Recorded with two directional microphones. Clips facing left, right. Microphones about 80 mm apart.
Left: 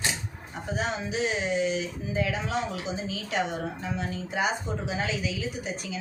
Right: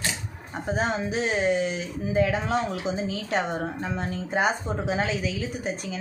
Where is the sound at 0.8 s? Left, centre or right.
Right.